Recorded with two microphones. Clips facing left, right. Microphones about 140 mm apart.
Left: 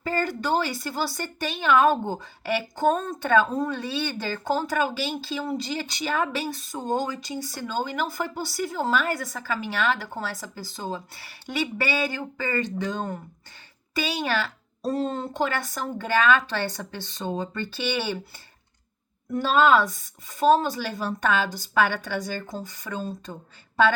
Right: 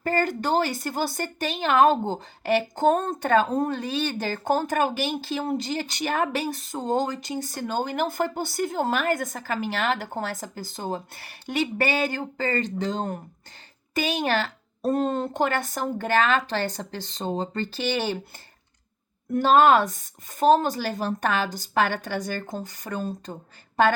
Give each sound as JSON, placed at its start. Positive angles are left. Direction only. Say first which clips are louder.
{"t": 0.0, "sound": "a woman's voice", "louder": "right 2 dB", "side_deg": -50}
{"t": 19.3, "sound": "a woman's voice", "louder": "right 2 dB", "side_deg": -50}